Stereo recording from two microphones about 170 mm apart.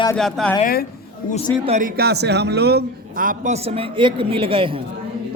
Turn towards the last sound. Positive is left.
turn(degrees=-30)  # may be behind; listen again after turning